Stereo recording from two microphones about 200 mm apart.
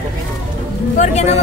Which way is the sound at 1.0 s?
35° left (ahead or behind).